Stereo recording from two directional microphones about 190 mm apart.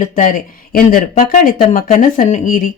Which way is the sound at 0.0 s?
45° left (ahead or behind).